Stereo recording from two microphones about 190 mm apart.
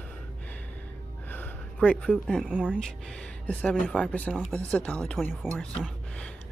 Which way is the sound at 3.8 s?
5° left (ahead or behind).